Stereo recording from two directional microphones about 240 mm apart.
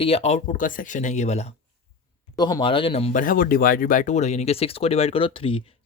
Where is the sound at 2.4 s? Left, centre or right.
Centre.